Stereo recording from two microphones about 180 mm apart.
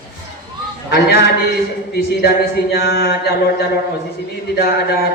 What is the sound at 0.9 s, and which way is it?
Speech, 65° left (ahead or behind).